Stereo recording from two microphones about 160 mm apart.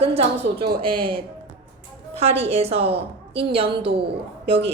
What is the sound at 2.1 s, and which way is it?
A woman's voice, 40° right (ahead or behind).